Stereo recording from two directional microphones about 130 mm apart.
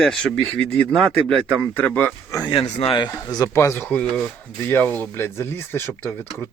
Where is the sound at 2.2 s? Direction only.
25° left (ahead or behind).